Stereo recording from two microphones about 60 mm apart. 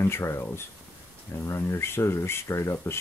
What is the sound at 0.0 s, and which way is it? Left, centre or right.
Speech, left.